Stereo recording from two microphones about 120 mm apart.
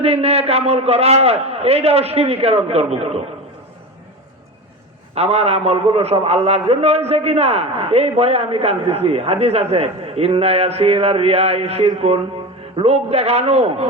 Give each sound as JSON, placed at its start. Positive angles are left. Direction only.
{"t": 0.0, "sound": "a man's voice", "side_deg": -55}
{"t": 5.1, "sound": "a man's voice", "side_deg": -60}